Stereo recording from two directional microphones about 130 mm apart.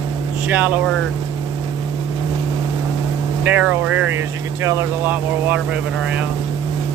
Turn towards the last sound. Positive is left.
turn(degrees=-10)  # may be behind; listen again after turning